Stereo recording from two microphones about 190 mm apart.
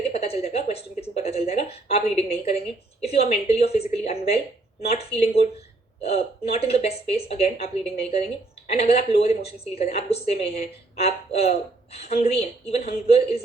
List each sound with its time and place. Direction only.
0.1 s a woman's voice: 35° left (ahead or behind)